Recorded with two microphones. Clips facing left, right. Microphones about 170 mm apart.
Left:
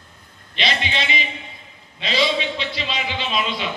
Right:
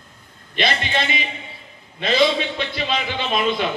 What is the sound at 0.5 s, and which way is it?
A man's voice, 50° right (ahead or behind).